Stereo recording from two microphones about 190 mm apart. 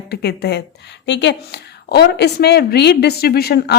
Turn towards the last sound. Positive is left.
turn(degrees=55)  # may be behind; listen again after turning